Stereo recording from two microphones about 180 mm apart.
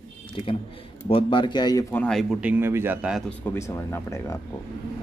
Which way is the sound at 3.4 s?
15° left (ahead or behind).